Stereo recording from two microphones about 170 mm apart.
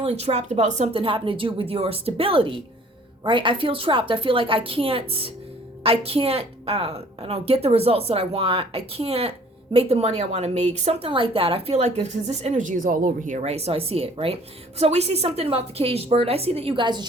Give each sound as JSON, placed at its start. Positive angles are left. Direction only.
{"t": 0.0, "sound": "a woman's voice", "side_deg": -40}